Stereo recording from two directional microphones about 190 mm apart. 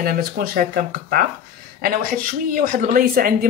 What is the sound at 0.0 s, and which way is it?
Speech, 50° right (ahead or behind).